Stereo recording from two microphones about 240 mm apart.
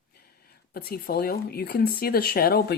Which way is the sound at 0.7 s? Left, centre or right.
Left.